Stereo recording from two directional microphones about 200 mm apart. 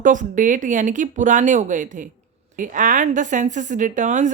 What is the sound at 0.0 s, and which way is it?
A woman's voice, 40° right (ahead or behind).